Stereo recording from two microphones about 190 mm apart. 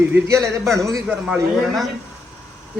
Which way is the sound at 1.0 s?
Centre (ahead or behind).